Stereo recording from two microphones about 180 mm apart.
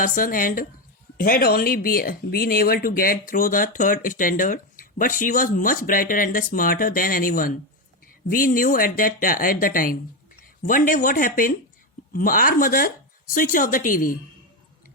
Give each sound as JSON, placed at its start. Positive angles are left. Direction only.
{"t": 0.0, "sound": "speech", "side_deg": 50}